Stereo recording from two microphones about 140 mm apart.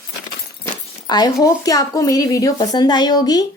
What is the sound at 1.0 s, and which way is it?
Speech, 30° left (ahead or behind).